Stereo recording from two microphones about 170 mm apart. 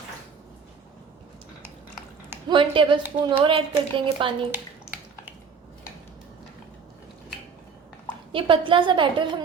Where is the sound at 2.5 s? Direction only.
30° right (ahead or behind).